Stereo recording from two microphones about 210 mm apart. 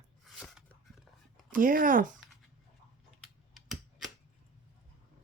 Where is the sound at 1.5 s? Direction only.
40° right (ahead or behind).